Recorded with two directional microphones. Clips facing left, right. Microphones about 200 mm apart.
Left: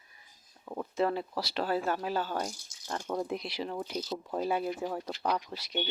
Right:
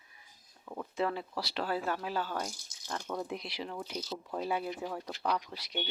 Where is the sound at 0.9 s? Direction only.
40° left (ahead or behind).